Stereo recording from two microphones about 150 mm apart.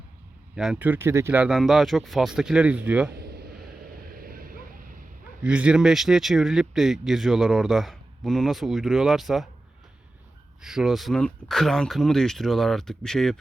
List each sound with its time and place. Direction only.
0.5 s speech: 5° right (ahead or behind)
3.1 s a sound: 90° right
4.0 s vehicle: 75° right (ahead or behind)
5.4 s speech: 10° right (ahead or behind)
10.6 s speech: 5° right (ahead or behind)